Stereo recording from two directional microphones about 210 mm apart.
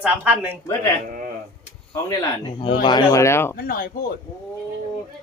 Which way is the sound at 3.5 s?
45° left (ahead or behind).